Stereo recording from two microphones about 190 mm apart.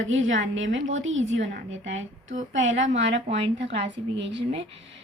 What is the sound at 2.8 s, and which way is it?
Speech, 35° right (ahead or behind).